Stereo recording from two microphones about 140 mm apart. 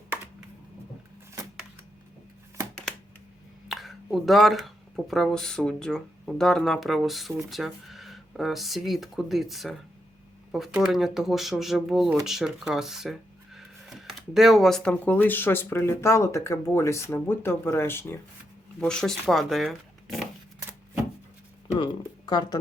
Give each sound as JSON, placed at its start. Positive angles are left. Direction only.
{"t": 3.7, "sound": "speech", "side_deg": 0}
{"t": 18.8, "sound": "speech", "side_deg": 5}
{"t": 22.3, "sound": "speech", "side_deg": 30}